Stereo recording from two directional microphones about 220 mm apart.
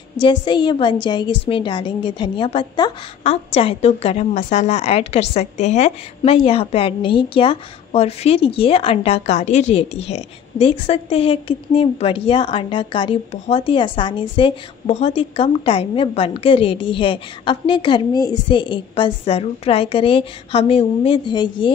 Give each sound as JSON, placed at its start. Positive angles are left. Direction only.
{"t": 0.2, "sound": "a woman's voice", "side_deg": 20}